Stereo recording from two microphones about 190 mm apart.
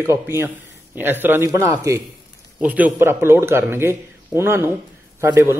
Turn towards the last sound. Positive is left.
turn(degrees=-10)  # may be behind; listen again after turning